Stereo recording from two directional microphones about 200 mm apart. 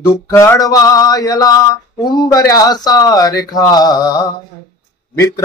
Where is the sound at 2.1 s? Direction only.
20° left (ahead or behind).